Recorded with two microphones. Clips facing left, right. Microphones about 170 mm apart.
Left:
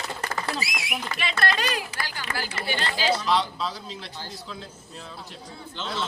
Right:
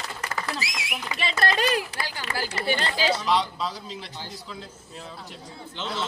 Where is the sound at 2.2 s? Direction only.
70° right (ahead or behind).